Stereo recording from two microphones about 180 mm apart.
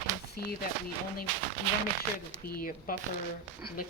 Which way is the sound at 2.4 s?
50° left (ahead or behind).